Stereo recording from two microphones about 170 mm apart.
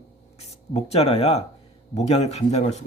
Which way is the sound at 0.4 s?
40° left (ahead or behind).